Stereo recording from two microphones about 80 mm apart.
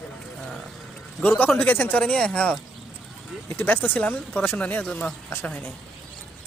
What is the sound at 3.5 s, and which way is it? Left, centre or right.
Speech, left.